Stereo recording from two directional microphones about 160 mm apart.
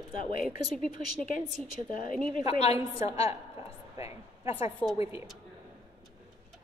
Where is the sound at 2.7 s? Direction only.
20° right (ahead or behind).